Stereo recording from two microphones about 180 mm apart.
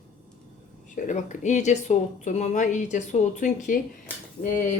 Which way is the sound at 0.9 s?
45° left (ahead or behind).